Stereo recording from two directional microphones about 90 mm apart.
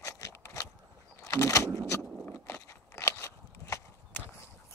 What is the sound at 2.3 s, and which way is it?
Scissors, 30° left (ahead or behind).